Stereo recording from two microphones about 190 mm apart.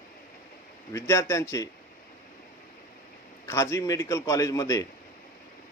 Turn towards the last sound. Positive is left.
turn(degrees=15)  # may be behind; listen again after turning